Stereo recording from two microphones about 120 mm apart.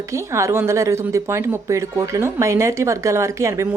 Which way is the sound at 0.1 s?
25° right (ahead or behind).